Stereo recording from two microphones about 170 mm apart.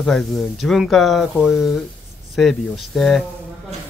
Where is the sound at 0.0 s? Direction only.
Centre (ahead or behind).